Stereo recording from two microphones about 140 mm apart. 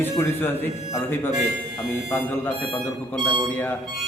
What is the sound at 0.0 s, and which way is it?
Speech, 15° left (ahead or behind).